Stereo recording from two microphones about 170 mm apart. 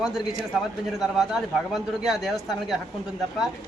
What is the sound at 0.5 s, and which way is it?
A man's voice, 5° right (ahead or behind).